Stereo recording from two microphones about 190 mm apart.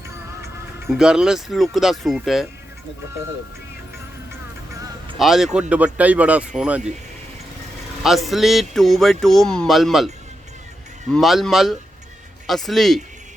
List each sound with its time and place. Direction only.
0.9 s speech: 5° right (ahead or behind)
4.7 s music: 20° right (ahead or behind)
5.1 s speech: centre (ahead or behind)
8.0 s speech: centre (ahead or behind)
11.1 s speech: centre (ahead or behind)